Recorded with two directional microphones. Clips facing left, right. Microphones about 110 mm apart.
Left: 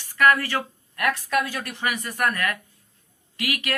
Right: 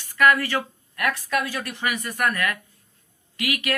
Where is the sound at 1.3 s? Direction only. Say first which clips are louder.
Left 1 dB; 40° left (ahead or behind).